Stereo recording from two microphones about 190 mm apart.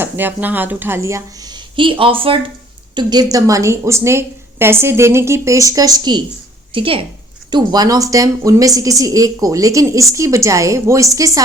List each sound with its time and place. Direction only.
0.0 s a woman's voice: 10° right (ahead or behind)